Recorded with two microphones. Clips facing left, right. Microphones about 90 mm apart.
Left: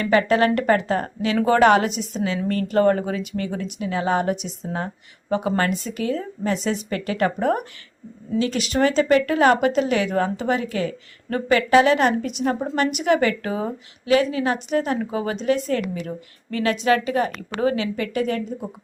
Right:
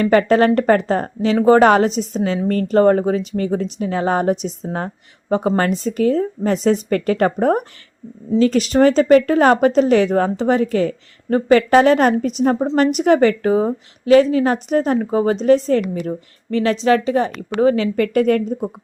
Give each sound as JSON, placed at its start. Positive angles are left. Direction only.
{"t": 0.0, "sound": "speech", "side_deg": -35}
{"t": 17.9, "sound": "speech", "side_deg": -50}